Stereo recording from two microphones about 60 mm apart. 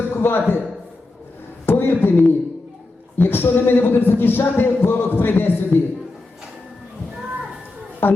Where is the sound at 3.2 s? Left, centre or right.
Left.